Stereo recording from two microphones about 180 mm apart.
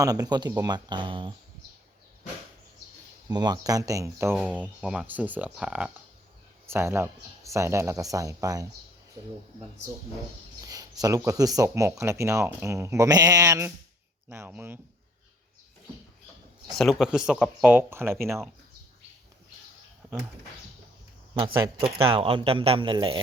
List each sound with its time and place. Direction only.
0.0 s speech: 20° right (ahead or behind)
3.2 s speech: 20° right (ahead or behind)
10.6 s speech: 20° right (ahead or behind)
16.7 s speech: centre (ahead or behind)
21.3 s speech: 30° right (ahead or behind)